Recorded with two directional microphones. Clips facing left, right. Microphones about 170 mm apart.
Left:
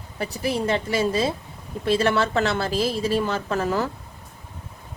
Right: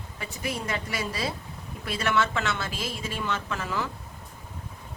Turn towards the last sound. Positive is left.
turn(degrees=40)  # may be behind; listen again after turning